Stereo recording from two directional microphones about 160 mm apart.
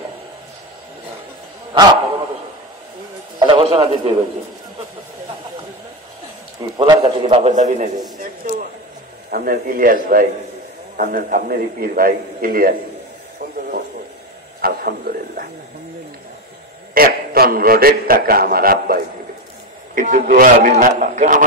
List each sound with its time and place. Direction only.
3.3 s a man's voice: 30° right (ahead or behind)
6.8 s a man's voice: 35° right (ahead or behind)
7.5 s a man's voice: 50° right (ahead or behind)
9.3 s a man's voice: 65° right (ahead or behind)
14.6 s speech: 65° right (ahead or behind)
16.9 s a man's voice: 65° right (ahead or behind)
20.0 s a man's voice: 55° right (ahead or behind)